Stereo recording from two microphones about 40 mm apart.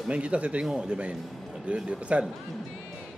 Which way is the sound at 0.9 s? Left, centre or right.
Right.